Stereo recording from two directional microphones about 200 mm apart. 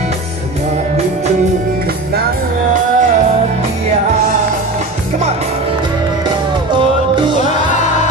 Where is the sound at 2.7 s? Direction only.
40° right (ahead or behind).